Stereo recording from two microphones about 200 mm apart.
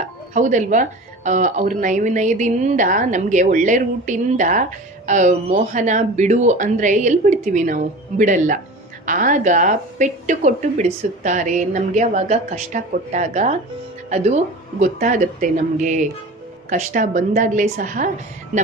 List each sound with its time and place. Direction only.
0.3 s a woman's voice: 40° right (ahead or behind)
14.8 s a woman's voice: 40° right (ahead or behind)